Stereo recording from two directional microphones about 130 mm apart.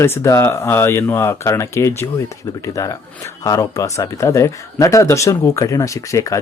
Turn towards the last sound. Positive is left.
turn(degrees=25)  # may be behind; listen again after turning